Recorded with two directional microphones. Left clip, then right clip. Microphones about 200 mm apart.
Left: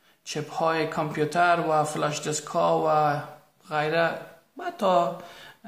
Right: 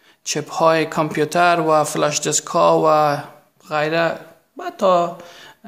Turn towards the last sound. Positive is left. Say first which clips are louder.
# right 4 dB
turn(degrees=-45)  # may be behind; listen again after turning